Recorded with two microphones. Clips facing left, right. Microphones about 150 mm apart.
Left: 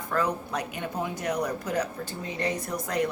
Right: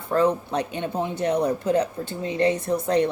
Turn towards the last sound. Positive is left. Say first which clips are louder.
# right 7 dB
turn(degrees=-30)  # may be behind; listen again after turning